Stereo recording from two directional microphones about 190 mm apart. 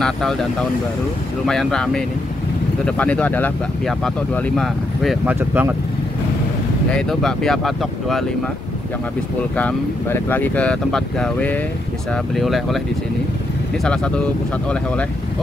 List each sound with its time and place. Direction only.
0.0 s speech: centre (ahead or behind)
6.9 s speech: 5° left (ahead or behind)
9.6 s speech: 10° left (ahead or behind)
13.8 s speech: 5° left (ahead or behind)